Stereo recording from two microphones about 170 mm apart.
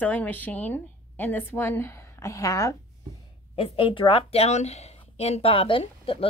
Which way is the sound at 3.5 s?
30° left (ahead or behind).